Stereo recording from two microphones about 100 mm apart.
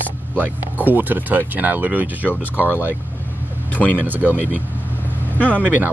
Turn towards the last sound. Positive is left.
turn(degrees=-20)  # may be behind; listen again after turning